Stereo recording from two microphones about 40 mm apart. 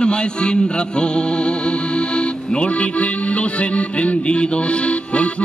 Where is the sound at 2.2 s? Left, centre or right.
Left.